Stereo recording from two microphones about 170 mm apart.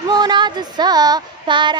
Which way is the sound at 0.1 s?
25° right (ahead or behind).